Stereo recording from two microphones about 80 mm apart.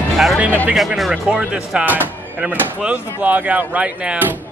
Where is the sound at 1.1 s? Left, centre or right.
Centre.